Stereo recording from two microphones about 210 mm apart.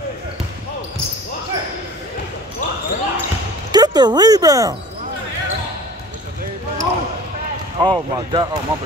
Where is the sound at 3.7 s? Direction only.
20° right (ahead or behind).